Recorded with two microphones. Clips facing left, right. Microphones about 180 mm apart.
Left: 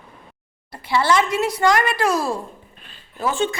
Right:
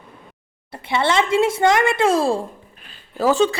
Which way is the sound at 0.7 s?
25° right (ahead or behind).